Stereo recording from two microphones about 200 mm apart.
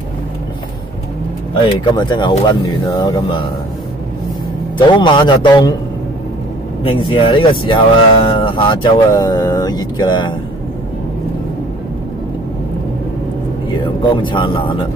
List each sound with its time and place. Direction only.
2.0 s speech: 20° left (ahead or behind)
4.7 s speech: 25° left (ahead or behind)
6.8 s speech: 25° left (ahead or behind)
13.7 s speech: 25° left (ahead or behind)